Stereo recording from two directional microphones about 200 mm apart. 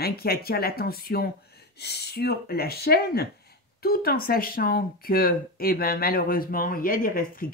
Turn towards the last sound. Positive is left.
turn(degrees=45)  # may be behind; listen again after turning